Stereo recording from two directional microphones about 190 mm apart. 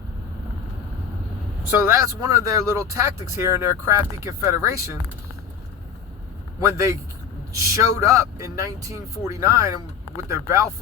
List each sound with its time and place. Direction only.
2.2 s speech: 15° right (ahead or behind)
6.6 s speech: 15° right (ahead or behind)